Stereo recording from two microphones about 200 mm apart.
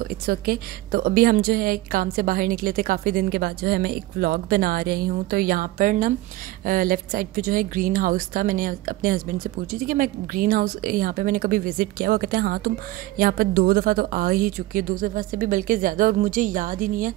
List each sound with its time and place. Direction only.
0.0 s a woman's voice: 45° right (ahead or behind)